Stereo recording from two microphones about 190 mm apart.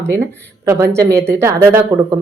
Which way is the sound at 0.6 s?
15° right (ahead or behind).